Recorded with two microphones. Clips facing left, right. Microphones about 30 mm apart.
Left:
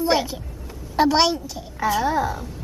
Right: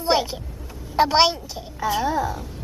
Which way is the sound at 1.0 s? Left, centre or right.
Centre.